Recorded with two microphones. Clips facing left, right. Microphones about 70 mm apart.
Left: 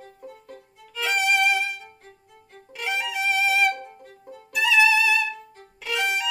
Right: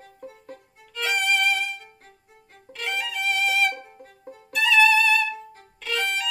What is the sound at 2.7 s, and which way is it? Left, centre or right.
Violin, centre.